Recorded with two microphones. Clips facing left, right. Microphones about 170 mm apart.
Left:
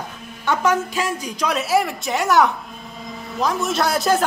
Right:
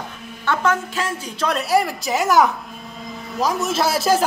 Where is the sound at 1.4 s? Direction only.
Centre (ahead or behind).